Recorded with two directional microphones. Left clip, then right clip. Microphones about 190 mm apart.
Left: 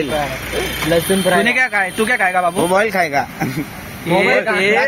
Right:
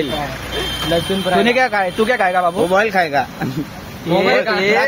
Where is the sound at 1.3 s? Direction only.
10° right (ahead or behind).